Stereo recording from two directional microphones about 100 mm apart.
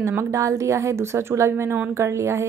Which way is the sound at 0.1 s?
30° right (ahead or behind).